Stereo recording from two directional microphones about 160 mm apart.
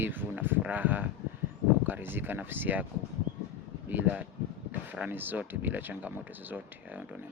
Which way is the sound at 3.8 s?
10° right (ahead or behind).